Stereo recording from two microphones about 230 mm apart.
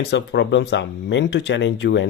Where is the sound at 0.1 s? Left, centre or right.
Left.